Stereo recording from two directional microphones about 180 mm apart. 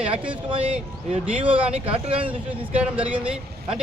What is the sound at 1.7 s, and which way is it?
Speech, 35° right (ahead or behind).